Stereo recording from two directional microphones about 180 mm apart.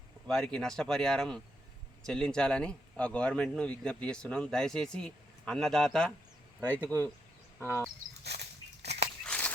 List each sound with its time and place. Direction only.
0.3 s speech: 5° left (ahead or behind)
8.2 s a sound: 65° right (ahead or behind)
9.2 s walk: 5° left (ahead or behind)